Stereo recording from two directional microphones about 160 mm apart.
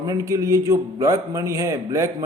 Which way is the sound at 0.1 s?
20° right (ahead or behind).